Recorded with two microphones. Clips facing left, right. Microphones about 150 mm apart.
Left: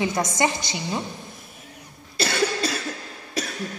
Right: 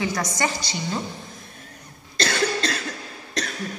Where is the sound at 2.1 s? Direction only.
5° left (ahead or behind).